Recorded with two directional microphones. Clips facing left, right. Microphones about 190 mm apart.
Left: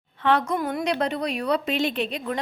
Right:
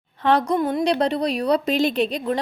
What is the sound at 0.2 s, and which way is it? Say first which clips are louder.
A woman's voice: right 3 dB; 35° right (ahead or behind).